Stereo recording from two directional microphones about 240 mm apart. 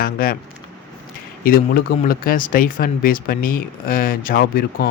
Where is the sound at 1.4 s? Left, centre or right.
Left.